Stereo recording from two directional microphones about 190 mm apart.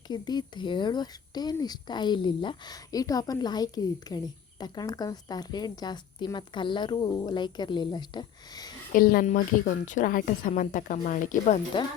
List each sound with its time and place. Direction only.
0.1 s speech: 20° left (ahead or behind)
8.9 s speech: 50° left (ahead or behind)